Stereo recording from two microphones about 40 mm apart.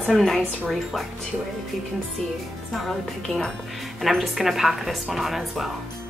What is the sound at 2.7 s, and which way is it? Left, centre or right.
Speech, centre.